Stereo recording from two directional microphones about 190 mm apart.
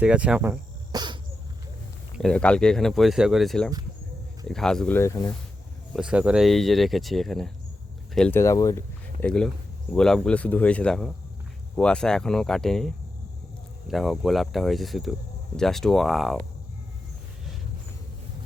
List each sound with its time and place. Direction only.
0.0 s cricket: 5° right (ahead or behind)
0.9 s a sound: 25° right (ahead or behind)
2.1 s speech: 5° left (ahead or behind)
5.9 s speech: 5° right (ahead or behind); by 8.8 s 15° left (ahead or behind)
9.2 s speech: 5° left (ahead or behind)